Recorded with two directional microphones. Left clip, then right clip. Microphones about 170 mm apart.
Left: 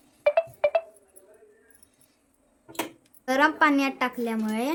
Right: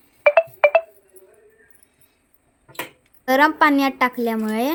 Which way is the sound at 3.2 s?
35° right (ahead or behind).